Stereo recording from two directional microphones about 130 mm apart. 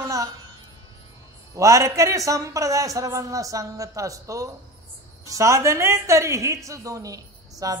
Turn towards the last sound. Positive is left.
turn(degrees=-25)  # may be behind; listen again after turning